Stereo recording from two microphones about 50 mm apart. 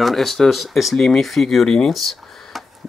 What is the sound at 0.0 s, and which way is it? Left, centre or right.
Speech, centre.